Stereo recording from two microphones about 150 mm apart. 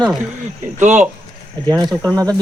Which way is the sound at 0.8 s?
55° right (ahead or behind).